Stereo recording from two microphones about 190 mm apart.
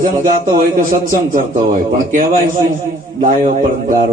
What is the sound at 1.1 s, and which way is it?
A man's voice, 45° right (ahead or behind).